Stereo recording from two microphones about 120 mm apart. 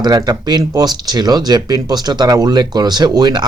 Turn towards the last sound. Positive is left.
turn(degrees=-35)  # may be behind; listen again after turning